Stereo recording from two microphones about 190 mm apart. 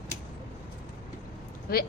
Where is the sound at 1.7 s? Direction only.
55° left (ahead or behind).